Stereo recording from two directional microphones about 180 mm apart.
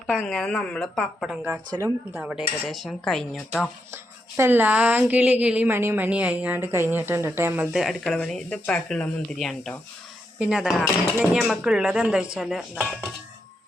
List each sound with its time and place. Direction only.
0.1 s speech: 5° left (ahead or behind)
1.5 s speech: 15° right (ahead or behind)
2.2 s speech: centre (ahead or behind)
3.9 s speech: 15° right (ahead or behind)